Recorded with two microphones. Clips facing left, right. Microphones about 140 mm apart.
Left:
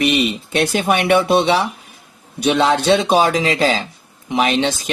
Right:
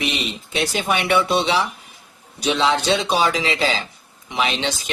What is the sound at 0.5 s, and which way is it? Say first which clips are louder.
Speech: left 4 dB; 50° left (ahead or behind).